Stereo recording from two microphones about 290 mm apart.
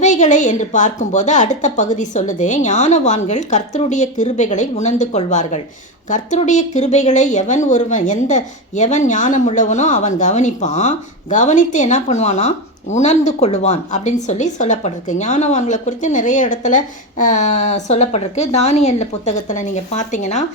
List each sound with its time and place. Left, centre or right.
0.0 s a woman's voice: left